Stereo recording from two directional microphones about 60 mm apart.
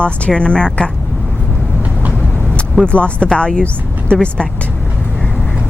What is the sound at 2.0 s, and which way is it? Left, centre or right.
Vehicle, centre.